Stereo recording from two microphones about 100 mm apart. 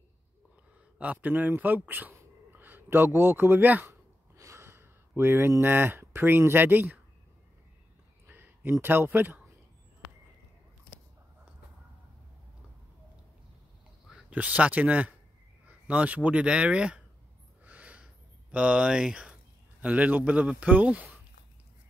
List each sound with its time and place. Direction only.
0.9 s a man's voice: 15° right (ahead or behind)
8.3 s a sound: 20° right (ahead or behind)
8.8 s speech: 20° right (ahead or behind)
14.3 s a man's voice: 15° right (ahead or behind)
17.6 s a sound: 15° right (ahead or behind)
19.8 s a man's voice: 15° right (ahead or behind)